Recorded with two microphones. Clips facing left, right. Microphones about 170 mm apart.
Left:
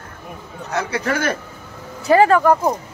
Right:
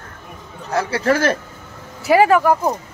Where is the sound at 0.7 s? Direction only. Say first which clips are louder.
Right 4 dB; 30° right (ahead or behind).